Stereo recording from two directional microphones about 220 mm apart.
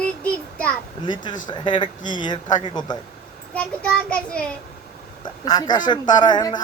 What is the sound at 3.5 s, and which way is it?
Child singing, 5° left (ahead or behind).